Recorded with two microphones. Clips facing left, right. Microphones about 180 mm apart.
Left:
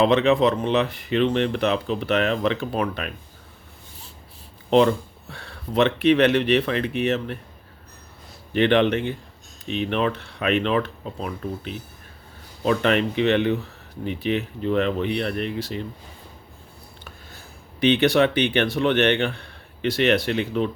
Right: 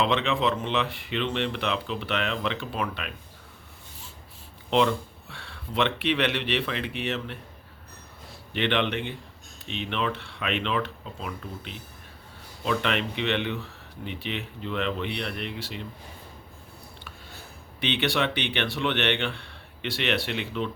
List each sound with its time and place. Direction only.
0.0 s speech: 40° left (ahead or behind)
4.7 s speech: 40° left (ahead or behind)
8.5 s speech: 40° left (ahead or behind)
17.7 s speech: 40° left (ahead or behind)